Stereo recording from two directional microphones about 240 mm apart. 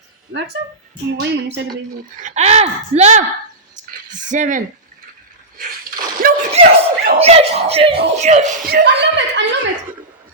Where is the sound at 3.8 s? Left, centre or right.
Right.